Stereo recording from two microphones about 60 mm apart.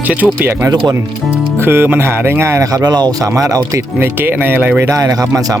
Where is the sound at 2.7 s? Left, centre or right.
Right.